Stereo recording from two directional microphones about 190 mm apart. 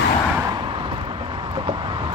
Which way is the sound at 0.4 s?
25° right (ahead or behind).